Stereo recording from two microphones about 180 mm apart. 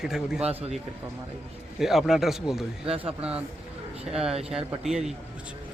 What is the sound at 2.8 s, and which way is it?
Speech, 30° right (ahead or behind).